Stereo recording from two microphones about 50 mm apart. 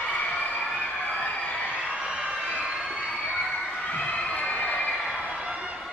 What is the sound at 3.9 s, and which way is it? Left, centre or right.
Cheering, left.